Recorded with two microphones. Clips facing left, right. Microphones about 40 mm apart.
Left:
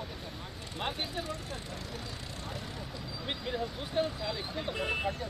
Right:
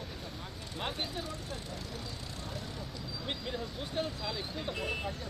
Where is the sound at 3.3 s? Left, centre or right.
Centre.